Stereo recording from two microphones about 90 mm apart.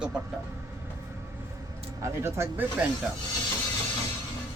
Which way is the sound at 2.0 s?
30° right (ahead or behind).